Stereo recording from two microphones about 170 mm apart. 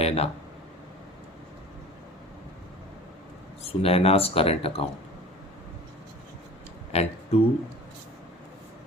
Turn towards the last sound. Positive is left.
turn(degrees=35)  # may be behind; listen again after turning